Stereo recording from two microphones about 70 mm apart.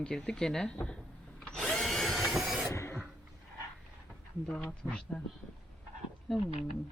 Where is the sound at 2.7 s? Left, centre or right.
Left.